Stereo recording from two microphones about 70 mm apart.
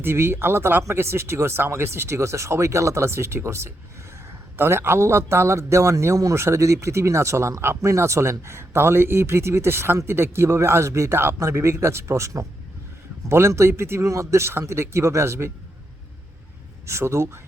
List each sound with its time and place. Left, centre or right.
0.0 s speech: right
16.8 s speech: right